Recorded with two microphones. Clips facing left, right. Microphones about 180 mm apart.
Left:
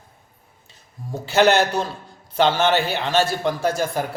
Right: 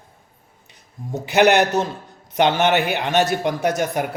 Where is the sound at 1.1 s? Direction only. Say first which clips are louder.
Right 1 dB; 15° right (ahead or behind).